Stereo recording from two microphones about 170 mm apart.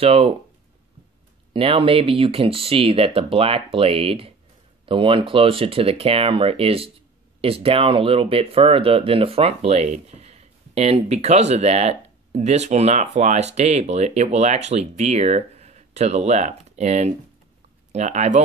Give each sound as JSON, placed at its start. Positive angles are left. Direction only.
{"t": 0.0, "sound": "speech", "side_deg": -35}
{"t": 1.5, "sound": "speech", "side_deg": -30}